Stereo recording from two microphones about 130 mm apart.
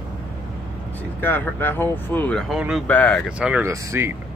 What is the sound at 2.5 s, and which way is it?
Speech, 5° right (ahead or behind).